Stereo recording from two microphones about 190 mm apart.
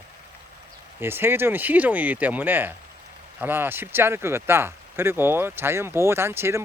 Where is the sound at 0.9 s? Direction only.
10° right (ahead or behind).